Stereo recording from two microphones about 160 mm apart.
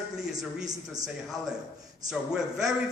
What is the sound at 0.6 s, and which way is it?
Speech, 25° right (ahead or behind).